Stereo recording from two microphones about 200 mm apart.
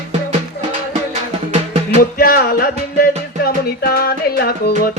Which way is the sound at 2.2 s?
45° left (ahead or behind).